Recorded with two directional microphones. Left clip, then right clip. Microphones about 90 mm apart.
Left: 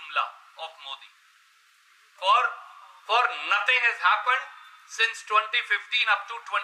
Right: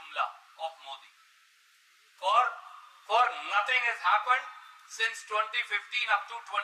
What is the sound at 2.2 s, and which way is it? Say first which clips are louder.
Speech: left 4 dB; 20° left (ahead or behind).